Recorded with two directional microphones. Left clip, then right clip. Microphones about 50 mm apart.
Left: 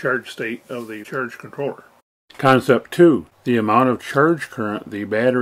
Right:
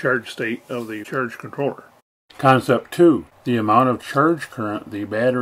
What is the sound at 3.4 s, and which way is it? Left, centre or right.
Speech, centre.